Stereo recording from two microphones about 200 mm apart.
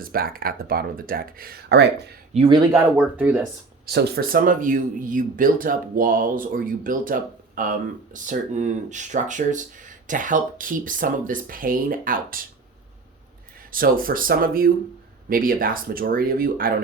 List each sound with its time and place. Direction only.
0.0 s speech: 45° right (ahead or behind)
2.3 s speech: 25° right (ahead or behind)
2.9 s speech: 10° right (ahead or behind)
3.8 s speech: 50° right (ahead or behind)
13.7 s speech: 45° right (ahead or behind)